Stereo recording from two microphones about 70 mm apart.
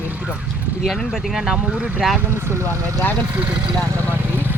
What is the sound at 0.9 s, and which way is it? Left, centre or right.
Speech, centre.